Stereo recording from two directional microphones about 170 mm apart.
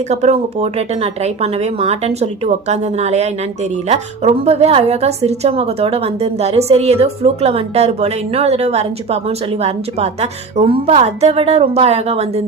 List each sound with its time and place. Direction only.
0.1 s a woman's voice: 40° right (ahead or behind)